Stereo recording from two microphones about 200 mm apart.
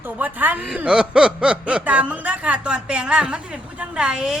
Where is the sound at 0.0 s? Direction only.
10° right (ahead or behind).